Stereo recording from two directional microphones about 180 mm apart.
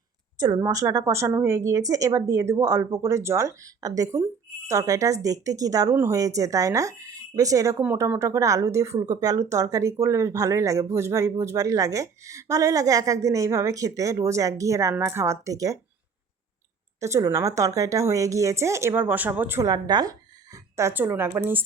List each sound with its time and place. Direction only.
0.3 s speech: 20° right (ahead or behind)
17.0 s speech: 15° right (ahead or behind)